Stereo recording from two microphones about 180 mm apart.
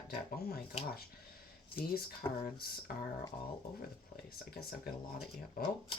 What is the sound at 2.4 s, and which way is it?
Speech, 55° left (ahead or behind).